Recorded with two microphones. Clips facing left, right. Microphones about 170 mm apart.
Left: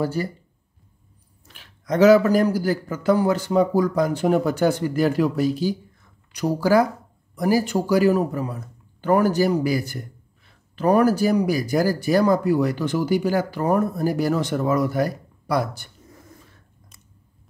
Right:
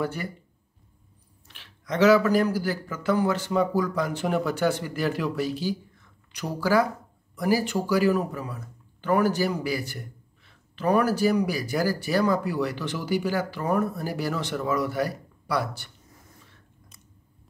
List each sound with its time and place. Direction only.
0.0 s a man's voice: 35° left (ahead or behind)
1.5 s a man's voice: 45° left (ahead or behind)